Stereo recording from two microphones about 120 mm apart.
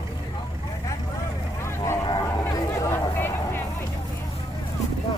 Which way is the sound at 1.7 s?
20° left (ahead or behind).